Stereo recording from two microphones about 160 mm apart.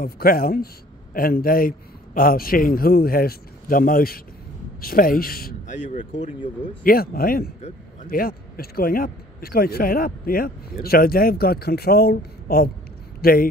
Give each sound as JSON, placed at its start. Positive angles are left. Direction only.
{"t": 0.0, "sound": "a man's voice", "side_deg": 65}
{"t": 5.7, "sound": "speech", "side_deg": 50}
{"t": 6.8, "sound": "a man's voice", "side_deg": 65}